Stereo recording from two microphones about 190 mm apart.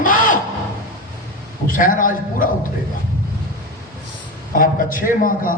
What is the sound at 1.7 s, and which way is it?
Speech, 45° left (ahead or behind).